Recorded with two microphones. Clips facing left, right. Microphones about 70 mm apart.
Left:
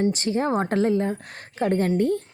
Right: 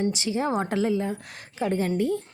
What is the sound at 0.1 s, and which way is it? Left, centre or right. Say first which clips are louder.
A woman's voice: left 3 dB; left.